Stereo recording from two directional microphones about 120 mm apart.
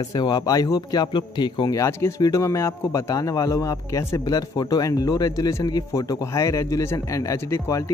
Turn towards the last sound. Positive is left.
turn(degrees=25)  # may be behind; listen again after turning